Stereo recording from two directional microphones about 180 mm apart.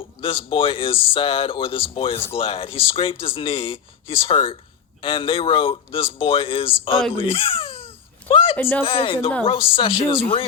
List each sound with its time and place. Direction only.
0.2 s speech: 30° left (ahead or behind)
8.3 s a sound: 30° left (ahead or behind)
8.5 s speech: 10° left (ahead or behind)
8.8 s speech: 30° left (ahead or behind)